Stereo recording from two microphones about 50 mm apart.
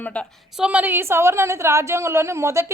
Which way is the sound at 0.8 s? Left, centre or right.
Right.